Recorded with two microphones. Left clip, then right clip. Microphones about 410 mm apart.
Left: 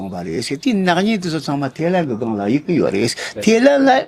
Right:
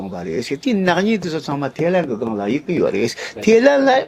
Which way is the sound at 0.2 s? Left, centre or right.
Left.